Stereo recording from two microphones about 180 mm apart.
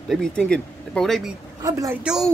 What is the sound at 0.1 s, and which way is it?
Speech, 5° left (ahead or behind).